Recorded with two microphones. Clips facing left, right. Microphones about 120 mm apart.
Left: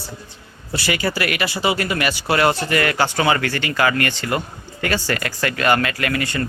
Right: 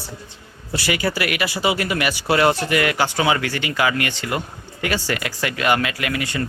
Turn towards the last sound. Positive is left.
turn(degrees=-10)  # may be behind; listen again after turning